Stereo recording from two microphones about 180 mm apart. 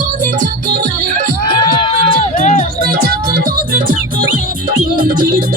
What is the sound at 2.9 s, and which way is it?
Music, 55° right (ahead or behind).